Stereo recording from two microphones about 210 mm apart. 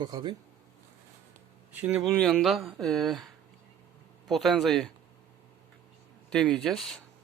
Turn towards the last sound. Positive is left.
turn(degrees=0)  # may be behind; listen again after turning